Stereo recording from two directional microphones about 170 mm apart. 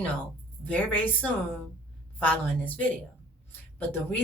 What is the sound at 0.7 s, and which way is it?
Speech, 10° left (ahead or behind).